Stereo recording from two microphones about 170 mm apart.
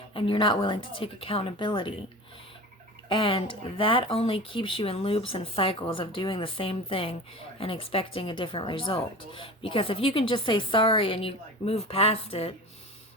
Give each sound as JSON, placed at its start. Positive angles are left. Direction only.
{"t": 0.1, "sound": "speech", "side_deg": 30}
{"t": 3.1, "sound": "speech", "side_deg": 30}